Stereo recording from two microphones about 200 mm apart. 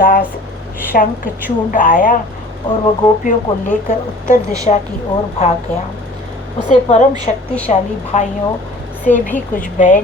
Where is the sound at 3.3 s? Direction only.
35° left (ahead or behind).